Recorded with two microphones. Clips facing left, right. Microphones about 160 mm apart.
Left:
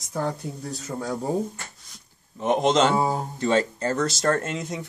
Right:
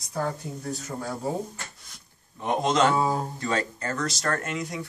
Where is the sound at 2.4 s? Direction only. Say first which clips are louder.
Left 3 dB; 20° left (ahead or behind).